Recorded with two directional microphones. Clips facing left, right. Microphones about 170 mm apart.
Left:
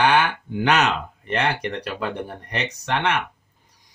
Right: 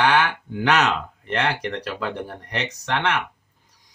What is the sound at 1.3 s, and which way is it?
Speech, 15° left (ahead or behind).